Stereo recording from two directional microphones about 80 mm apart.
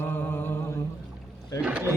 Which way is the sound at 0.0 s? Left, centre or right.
Left.